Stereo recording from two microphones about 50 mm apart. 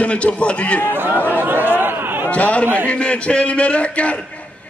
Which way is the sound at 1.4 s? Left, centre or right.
Right.